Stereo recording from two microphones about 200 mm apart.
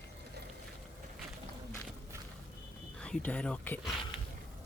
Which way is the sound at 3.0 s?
5° left (ahead or behind).